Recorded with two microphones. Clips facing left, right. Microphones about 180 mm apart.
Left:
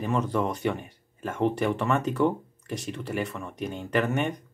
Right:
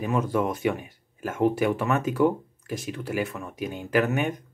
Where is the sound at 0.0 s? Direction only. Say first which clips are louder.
Right 2 dB; 5° right (ahead or behind).